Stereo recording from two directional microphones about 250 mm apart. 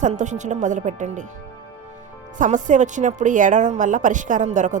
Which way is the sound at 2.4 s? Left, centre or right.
Right.